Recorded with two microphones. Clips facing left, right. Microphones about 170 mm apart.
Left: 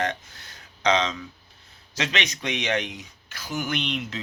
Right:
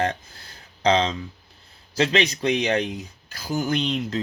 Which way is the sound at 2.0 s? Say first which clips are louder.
Right 8 dB; 35° right (ahead or behind).